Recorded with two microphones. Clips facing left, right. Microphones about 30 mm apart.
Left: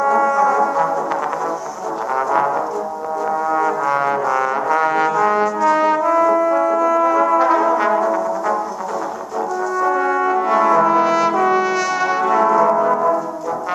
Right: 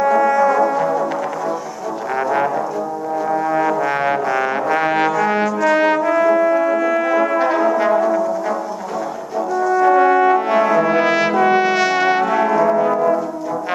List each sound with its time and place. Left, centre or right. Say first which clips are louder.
0.0 s brass instrument: right 1 dB; right
2.1 s music: left 1 dB; right
3.4 s trombone: left 1 dB; right
6.0 s brass instrument: even; right
7.7 s brass instrument: right 1 dB; centre
9.8 s brass instrument: right 5 dB; right
10.9 s brass instrument: even; right
12.3 s brass instrument: left 2 dB; right